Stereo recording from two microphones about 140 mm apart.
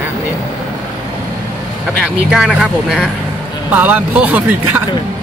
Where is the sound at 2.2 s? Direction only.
5° right (ahead or behind).